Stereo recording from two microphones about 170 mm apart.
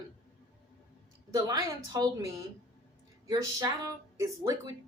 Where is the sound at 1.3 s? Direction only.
25° right (ahead or behind).